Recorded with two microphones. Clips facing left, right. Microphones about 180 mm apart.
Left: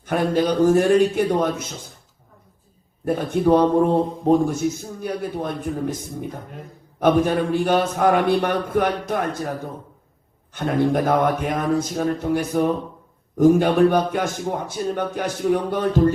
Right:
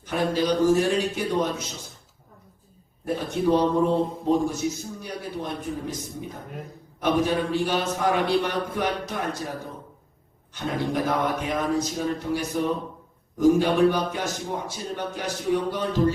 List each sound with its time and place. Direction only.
0.0 s a man's voice: 55° left (ahead or behind)
3.0 s a man's voice: 55° left (ahead or behind)
10.5 s a man's voice: 55° left (ahead or behind)